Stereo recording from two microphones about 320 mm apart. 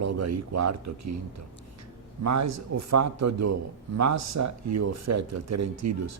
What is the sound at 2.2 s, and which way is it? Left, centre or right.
A man's voice, right.